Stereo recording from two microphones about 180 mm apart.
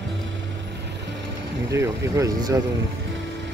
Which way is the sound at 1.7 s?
15° right (ahead or behind).